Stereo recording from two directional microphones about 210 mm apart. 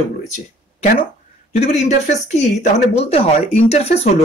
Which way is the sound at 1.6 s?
35° left (ahead or behind).